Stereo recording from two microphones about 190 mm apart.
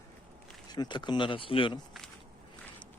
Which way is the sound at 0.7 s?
20° left (ahead or behind).